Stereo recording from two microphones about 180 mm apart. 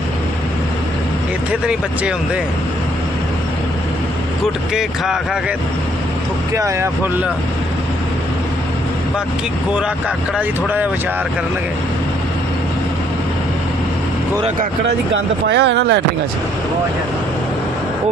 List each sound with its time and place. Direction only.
1.6 s speech: 5° right (ahead or behind)
4.7 s speech: 5° right (ahead or behind)
6.5 s speech: 15° right (ahead or behind)
10.3 s speech: 10° right (ahead or behind)
14.8 s speech: 80° right